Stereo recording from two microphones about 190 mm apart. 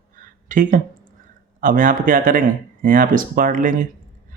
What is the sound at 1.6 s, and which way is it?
Speech, 45° right (ahead or behind).